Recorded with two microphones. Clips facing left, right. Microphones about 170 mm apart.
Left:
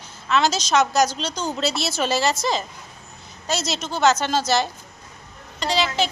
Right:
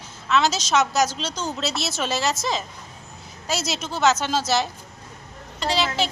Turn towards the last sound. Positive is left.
turn(degrees=0)  # may be behind; listen again after turning